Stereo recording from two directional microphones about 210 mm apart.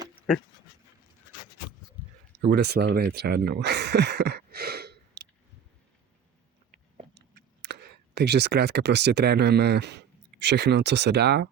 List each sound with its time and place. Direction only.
2.4 s speech: 50° right (ahead or behind)
7.7 s speech: 50° right (ahead or behind)